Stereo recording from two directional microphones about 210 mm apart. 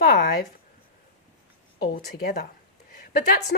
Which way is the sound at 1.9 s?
50° left (ahead or behind).